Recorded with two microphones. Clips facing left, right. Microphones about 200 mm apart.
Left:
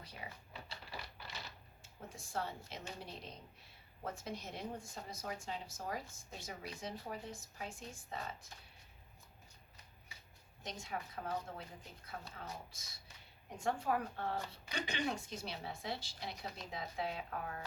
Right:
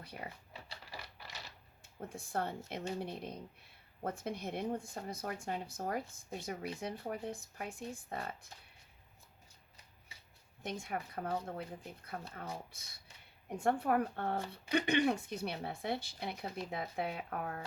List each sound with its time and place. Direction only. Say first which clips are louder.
0.2 s speech: right 3 dB; 55° right (ahead or behind)
1.8 s speech: right 7 dB; 60° right (ahead or behind)
10.6 s speech: right 4 dB; 60° right (ahead or behind)